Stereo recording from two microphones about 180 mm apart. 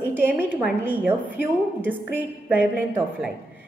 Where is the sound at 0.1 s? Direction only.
10° right (ahead or behind).